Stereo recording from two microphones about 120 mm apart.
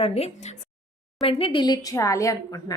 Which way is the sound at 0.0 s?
55° left (ahead or behind).